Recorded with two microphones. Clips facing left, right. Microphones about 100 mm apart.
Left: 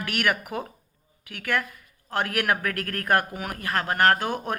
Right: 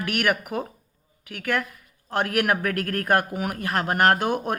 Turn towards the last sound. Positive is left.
turn(degrees=-10)  # may be behind; listen again after turning